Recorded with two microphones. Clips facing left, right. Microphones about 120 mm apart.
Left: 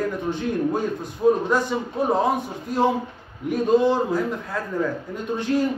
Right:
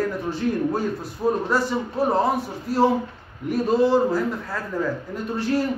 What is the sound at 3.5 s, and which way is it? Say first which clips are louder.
A man's voice: even; 5° right (ahead or behind).